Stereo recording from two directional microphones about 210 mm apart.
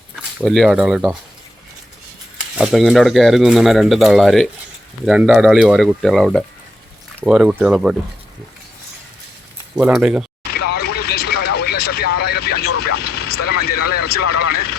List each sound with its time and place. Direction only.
0.2 s speech: 5° right (ahead or behind)
2.6 s speech: centre (ahead or behind)
9.7 s speech: 5° right (ahead or behind)
10.5 s vehicle: 50° left (ahead or behind)